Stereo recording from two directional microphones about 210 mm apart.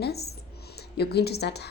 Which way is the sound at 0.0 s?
50° left (ahead or behind).